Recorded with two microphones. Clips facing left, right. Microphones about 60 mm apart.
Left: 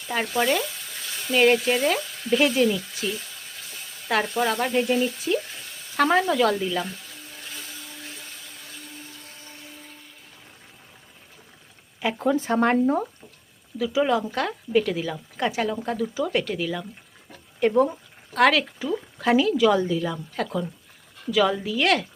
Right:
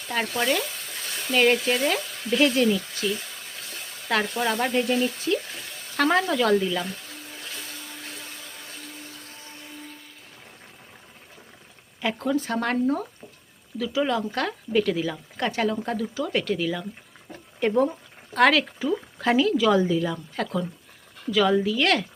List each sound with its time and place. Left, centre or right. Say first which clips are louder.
0.1 s a woman's voice: left 2 dB; centre
4.1 s a woman's voice: left 1 dB; centre
11.9 s speech: left 2 dB; centre
13.7 s a woman's voice: left 3 dB; centre